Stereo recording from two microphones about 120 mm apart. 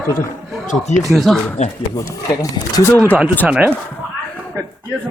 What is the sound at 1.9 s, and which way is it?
Speech, 30° left (ahead or behind).